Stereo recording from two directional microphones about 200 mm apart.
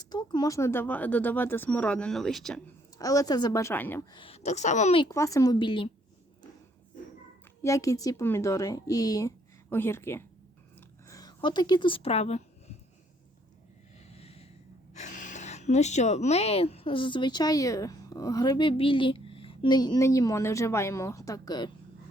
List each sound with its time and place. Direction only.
0.1 s speech: 20° left (ahead or behind); by 2.6 s 5° left (ahead or behind)
3.0 s speech: 15° left (ahead or behind)
4.1 s a woman's voice: 25° left (ahead or behind)
7.6 s speech: 15° left (ahead or behind)
10.8 s a sound: 15° left (ahead or behind); by 12.7 s 30° left (ahead or behind)
14.1 s snort: 30° left (ahead or behind)
14.9 s speech: 40° left (ahead or behind); by 21.7 s 20° left (ahead or behind)